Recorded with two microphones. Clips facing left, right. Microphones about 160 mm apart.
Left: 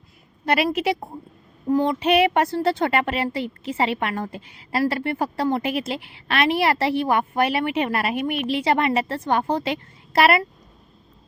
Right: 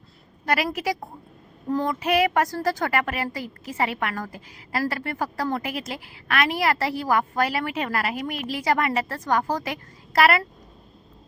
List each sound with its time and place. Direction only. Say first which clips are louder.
0.4 s a woman's voice: left 4 dB; 25° left (ahead or behind)